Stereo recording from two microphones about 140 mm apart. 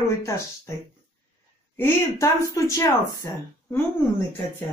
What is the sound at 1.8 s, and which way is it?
A woman's voice, 20° left (ahead or behind).